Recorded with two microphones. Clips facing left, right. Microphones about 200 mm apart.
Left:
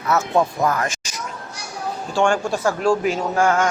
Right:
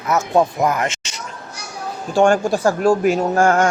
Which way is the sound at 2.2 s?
40° right (ahead or behind).